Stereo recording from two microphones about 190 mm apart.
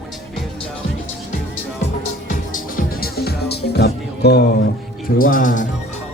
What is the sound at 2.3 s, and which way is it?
Music, 45° left (ahead or behind).